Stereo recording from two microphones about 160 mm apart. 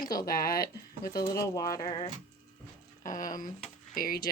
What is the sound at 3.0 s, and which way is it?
Speech, 55° left (ahead or behind).